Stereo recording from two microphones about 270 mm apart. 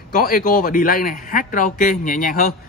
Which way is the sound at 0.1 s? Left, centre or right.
Left.